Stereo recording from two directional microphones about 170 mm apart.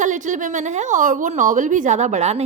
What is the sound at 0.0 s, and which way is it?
A woman's voice, 45° right (ahead or behind).